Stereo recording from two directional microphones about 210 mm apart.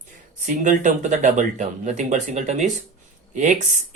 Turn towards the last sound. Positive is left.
turn(degrees=-35)  # may be behind; listen again after turning